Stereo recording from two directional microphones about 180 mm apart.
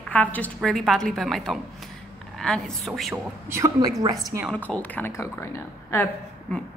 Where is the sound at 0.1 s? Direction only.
10° left (ahead or behind).